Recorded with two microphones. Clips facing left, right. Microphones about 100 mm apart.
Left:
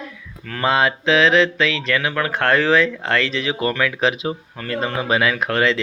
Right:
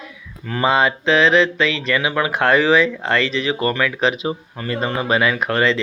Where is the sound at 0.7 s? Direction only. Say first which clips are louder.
Even; centre (ahead or behind).